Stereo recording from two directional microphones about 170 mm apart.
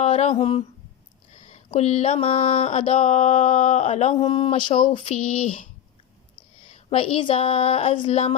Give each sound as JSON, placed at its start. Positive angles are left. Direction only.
{"t": 0.0, "sound": "speech", "side_deg": 40}
{"t": 1.5, "sound": "mantra", "side_deg": 40}
{"t": 4.1, "sound": "speech", "side_deg": 25}
{"t": 4.7, "sound": "mantra", "side_deg": 30}
{"t": 6.9, "sound": "mantra", "side_deg": 35}